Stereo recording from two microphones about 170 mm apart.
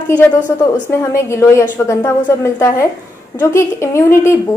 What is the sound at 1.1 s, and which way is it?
A woman's voice, 15° left (ahead or behind).